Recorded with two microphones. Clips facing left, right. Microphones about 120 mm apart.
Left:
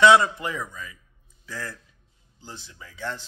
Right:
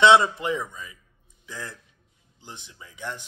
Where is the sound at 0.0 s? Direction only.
25° right (ahead or behind).